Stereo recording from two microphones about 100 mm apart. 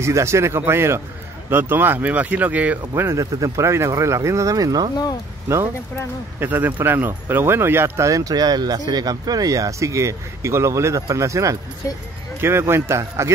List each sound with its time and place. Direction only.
0.0 s speech: 30° right (ahead or behind)
2.9 s speech: 30° right (ahead or behind)
6.4 s speech: 20° right (ahead or behind)